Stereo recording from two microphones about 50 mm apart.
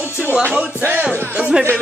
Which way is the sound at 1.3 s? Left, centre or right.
Right.